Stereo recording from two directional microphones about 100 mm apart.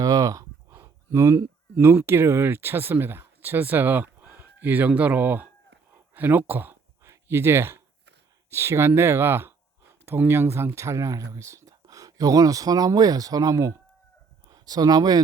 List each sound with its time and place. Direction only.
0.0 s speech: 40° right (ahead or behind); by 5.5 s 15° right (ahead or behind)
5.9 s a sound: 20° right (ahead or behind)
8.4 s speech: 25° right (ahead or behind)